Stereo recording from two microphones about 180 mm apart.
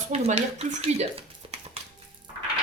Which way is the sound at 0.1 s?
35° right (ahead or behind).